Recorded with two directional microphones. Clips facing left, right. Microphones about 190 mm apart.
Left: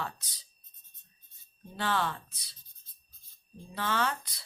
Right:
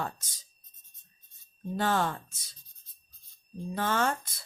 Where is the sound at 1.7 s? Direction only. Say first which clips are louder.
Right 3 dB; 45° right (ahead or behind).